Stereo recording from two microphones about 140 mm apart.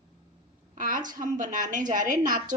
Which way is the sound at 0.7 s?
70° right (ahead or behind).